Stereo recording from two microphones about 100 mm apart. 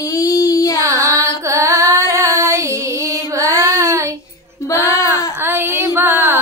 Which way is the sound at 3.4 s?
35° right (ahead or behind).